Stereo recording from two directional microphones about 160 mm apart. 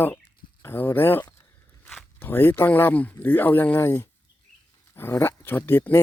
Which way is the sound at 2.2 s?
15° left (ahead or behind).